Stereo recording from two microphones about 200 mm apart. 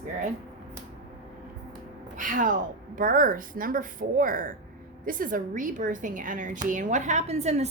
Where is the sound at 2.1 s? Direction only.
40° right (ahead or behind).